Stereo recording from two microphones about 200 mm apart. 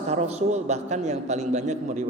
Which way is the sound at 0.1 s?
35° right (ahead or behind).